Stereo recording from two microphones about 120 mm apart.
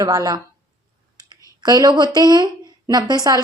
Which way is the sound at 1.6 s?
35° right (ahead or behind).